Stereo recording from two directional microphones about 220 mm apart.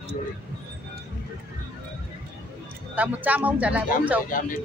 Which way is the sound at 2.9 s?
5° right (ahead or behind).